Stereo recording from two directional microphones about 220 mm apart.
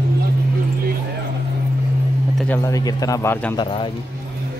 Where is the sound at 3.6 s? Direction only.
20° left (ahead or behind).